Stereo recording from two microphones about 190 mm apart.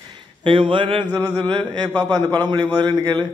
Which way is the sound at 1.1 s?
10° left (ahead or behind).